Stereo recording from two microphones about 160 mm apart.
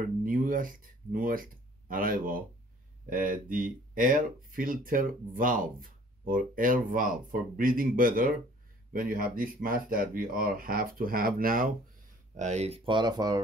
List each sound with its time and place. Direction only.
0.2 s speech: 60° right (ahead or behind)
12.4 s speech: 45° right (ahead or behind); by 13.4 s 25° right (ahead or behind)